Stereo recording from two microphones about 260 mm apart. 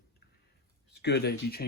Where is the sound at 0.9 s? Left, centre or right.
Left.